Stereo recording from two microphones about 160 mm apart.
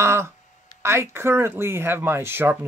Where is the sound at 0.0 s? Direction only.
15° right (ahead or behind).